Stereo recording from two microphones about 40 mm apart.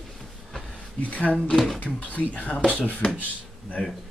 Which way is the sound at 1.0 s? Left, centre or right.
Left.